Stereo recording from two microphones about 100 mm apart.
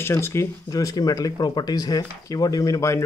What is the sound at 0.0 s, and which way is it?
Speech, 25° left (ahead or behind).